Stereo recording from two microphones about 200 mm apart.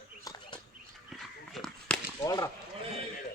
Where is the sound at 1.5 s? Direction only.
Centre (ahead or behind).